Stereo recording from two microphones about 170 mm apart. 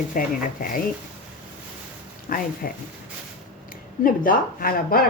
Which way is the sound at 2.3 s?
55° left (ahead or behind).